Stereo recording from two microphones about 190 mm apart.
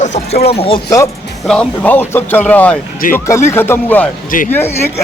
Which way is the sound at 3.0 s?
45° left (ahead or behind).